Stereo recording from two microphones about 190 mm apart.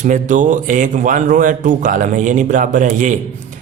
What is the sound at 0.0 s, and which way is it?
Speech, 40° right (ahead or behind).